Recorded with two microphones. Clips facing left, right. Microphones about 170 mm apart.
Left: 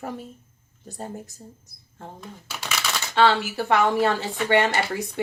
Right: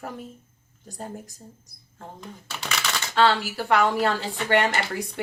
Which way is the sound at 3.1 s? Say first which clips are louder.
Left 1 dB; 20° left (ahead or behind).